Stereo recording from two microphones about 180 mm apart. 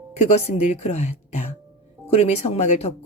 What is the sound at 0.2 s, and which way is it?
Speech, 40° left (ahead or behind).